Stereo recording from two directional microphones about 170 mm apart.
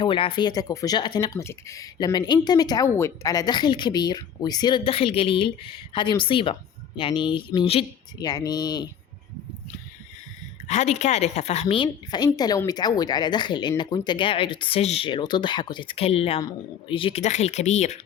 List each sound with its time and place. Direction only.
0.0 s speech: 30° left (ahead or behind)
10.7 s speech: 40° left (ahead or behind)